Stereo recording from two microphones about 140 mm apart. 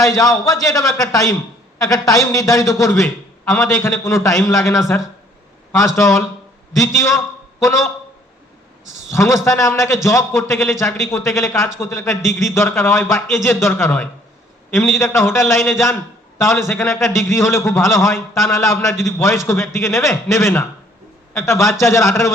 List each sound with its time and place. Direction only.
0.0 s a man's voice: 25° left (ahead or behind)
9.0 s a man's voice: 20° left (ahead or behind)